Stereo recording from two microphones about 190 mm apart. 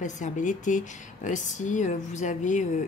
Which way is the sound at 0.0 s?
40° left (ahead or behind).